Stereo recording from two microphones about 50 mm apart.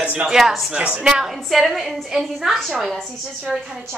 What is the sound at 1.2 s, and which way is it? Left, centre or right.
A woman's voice, centre.